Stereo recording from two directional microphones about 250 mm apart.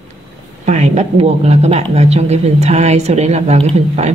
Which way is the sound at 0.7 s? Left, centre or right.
Right.